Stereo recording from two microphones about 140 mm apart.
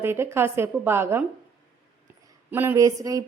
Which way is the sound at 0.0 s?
15° right (ahead or behind).